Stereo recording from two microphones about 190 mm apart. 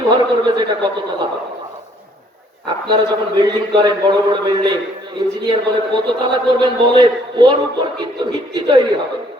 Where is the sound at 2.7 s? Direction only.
25° right (ahead or behind).